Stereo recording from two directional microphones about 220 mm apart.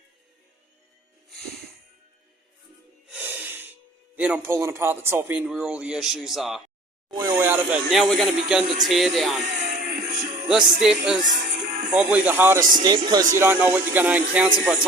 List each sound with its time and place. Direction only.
1.3 s music: centre (ahead or behind)
3.1 s music: 5° right (ahead or behind)
4.1 s speech: 5° right (ahead or behind)
7.1 s a man's voice: 15° right (ahead or behind)
9.6 s music: 35° right (ahead or behind)
9.8 s music: 45° right (ahead or behind)
10.8 s speech: 5° right (ahead or behind)
11.2 s music: 35° right (ahead or behind)
11.9 s a man's voice: 5° right (ahead or behind)